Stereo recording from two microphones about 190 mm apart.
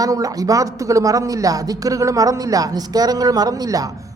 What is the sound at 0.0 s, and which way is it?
A woman's voice, 20° right (ahead or behind).